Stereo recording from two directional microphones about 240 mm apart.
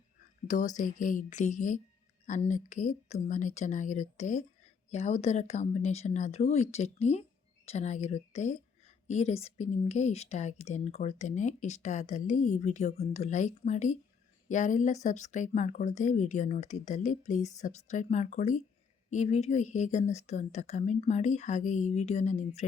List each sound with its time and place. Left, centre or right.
0.4 s speech: left